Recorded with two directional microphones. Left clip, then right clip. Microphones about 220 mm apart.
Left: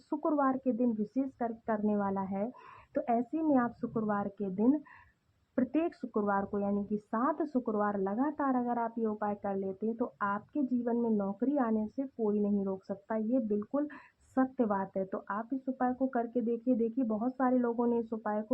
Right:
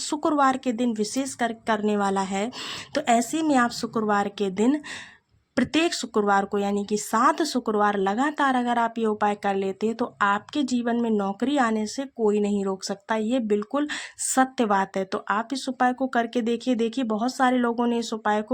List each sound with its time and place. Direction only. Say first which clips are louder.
0.1 s speech: right 9 dB; 30° right (ahead or behind)